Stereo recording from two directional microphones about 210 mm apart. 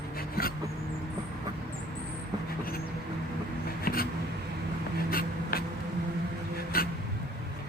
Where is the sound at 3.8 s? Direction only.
45° left (ahead or behind).